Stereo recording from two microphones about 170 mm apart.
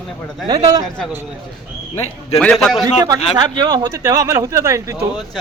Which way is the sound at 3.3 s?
25° right (ahead or behind).